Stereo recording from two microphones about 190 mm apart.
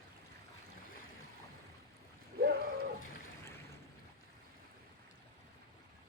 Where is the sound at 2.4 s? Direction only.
50° right (ahead or behind).